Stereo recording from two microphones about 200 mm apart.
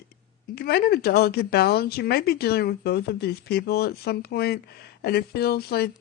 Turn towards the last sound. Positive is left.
turn(degrees=50)  # may be behind; listen again after turning